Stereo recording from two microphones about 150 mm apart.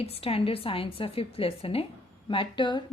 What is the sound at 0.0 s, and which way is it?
A woman's voice, 40° left (ahead or behind).